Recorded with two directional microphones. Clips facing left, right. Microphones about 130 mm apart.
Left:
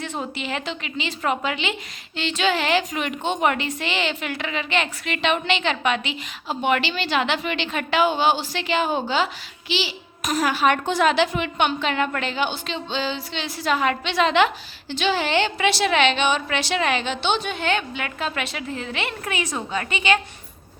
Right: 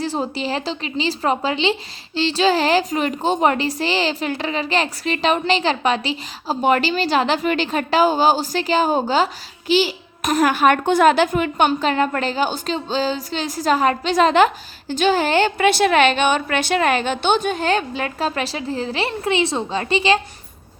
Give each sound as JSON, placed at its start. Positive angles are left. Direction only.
{"t": 0.0, "sound": "a woman's voice", "side_deg": -35}